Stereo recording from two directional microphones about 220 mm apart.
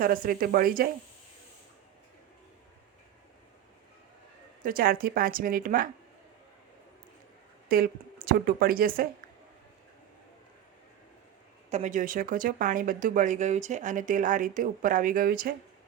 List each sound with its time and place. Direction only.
0.0 s speech: 40° right (ahead or behind)
4.6 s speech: 40° right (ahead or behind)
7.7 s speech: 40° right (ahead or behind)
11.7 s speech: 35° right (ahead or behind)